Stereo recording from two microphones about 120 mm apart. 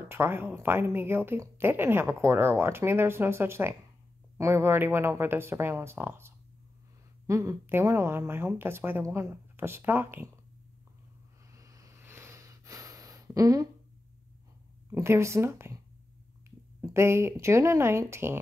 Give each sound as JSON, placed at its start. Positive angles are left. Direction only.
{"t": 0.1, "sound": "speech", "side_deg": -20}
{"t": 11.5, "sound": "a sound", "side_deg": -30}
{"t": 14.9, "sound": "speech", "side_deg": -20}